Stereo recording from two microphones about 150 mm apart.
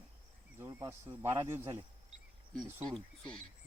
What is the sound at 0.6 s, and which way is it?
Speech, 15° right (ahead or behind).